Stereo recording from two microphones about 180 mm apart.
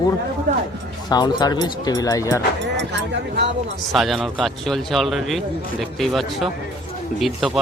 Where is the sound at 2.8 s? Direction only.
75° right (ahead or behind).